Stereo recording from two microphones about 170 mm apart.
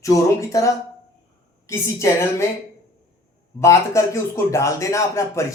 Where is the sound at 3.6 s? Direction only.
15° left (ahead or behind).